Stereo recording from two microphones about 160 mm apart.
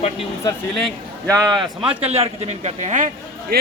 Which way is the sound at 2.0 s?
40° right (ahead or behind).